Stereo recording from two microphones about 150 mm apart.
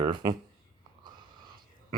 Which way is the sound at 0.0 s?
30° right (ahead or behind).